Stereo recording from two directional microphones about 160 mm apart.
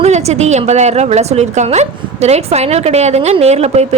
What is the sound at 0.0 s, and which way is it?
A woman's voice, 45° right (ahead or behind).